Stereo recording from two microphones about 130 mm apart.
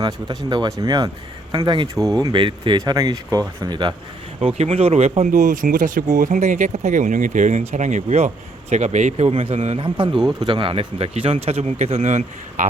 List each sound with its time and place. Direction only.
0.0 s speech: 35° right (ahead or behind)
4.4 s speech: 50° right (ahead or behind); by 6.0 s 85° right
6.1 s speech: 75° right (ahead or behind)